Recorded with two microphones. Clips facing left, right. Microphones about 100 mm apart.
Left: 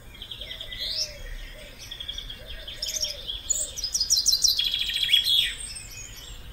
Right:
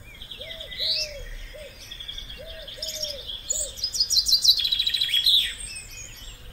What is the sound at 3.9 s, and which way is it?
Chirp, 5° right (ahead or behind).